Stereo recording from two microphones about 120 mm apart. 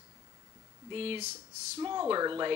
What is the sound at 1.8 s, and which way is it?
Speech, 25° right (ahead or behind).